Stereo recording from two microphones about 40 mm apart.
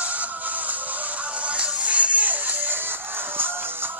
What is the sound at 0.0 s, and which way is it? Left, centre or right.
Music, right.